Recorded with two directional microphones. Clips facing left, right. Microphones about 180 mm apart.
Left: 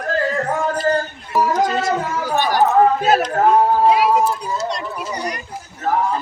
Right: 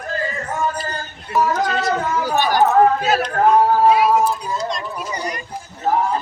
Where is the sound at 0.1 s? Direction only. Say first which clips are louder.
Left 5 dB; 70° left (ahead or behind).